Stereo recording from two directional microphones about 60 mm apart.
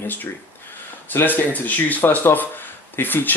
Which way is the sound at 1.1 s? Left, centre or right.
Left.